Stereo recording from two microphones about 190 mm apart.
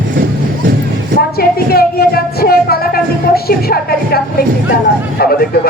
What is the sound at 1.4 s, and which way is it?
Speech, 55° left (ahead or behind).